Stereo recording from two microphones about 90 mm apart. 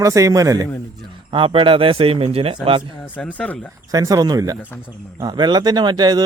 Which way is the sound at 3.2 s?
15° left (ahead or behind).